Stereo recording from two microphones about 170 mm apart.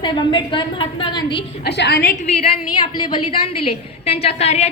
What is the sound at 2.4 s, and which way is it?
A woman's voice, 30° left (ahead or behind).